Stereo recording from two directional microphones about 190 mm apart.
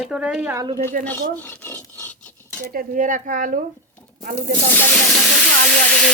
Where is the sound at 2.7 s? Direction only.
45° right (ahead or behind).